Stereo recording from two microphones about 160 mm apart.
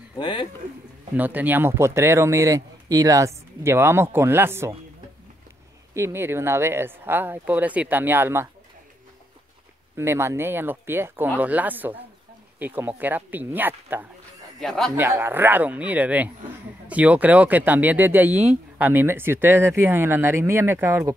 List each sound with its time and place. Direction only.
0.2 s speech: 30° left (ahead or behind)
1.1 s speech: 10° right (ahead or behind)
5.9 s speech: 15° right (ahead or behind)
9.9 s speech: 15° right (ahead or behind)
14.6 s speech: centre (ahead or behind)
15.0 s speech: 15° right (ahead or behind)